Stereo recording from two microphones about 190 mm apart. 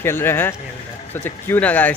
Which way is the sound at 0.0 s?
10° left (ahead or behind).